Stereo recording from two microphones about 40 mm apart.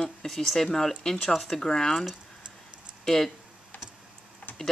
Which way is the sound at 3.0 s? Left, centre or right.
Centre.